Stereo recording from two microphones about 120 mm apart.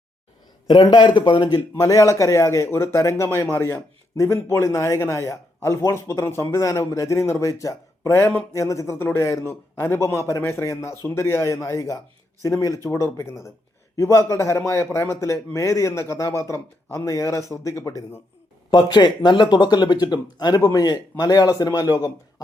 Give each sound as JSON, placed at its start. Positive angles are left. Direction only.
{"t": 0.7, "sound": "speech", "side_deg": 40}
{"t": 18.7, "sound": "a man's voice", "side_deg": 35}